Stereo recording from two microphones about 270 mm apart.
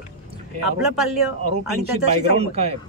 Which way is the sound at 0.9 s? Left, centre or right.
Centre.